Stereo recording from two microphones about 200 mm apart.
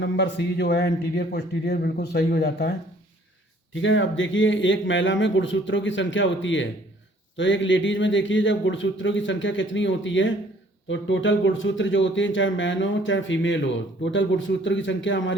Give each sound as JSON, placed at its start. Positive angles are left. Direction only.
{"t": 0.0, "sound": "a man's voice", "side_deg": 60}
{"t": 3.8, "sound": "a man's voice", "side_deg": 70}